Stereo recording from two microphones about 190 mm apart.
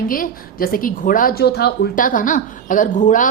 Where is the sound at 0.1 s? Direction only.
50° left (ahead or behind).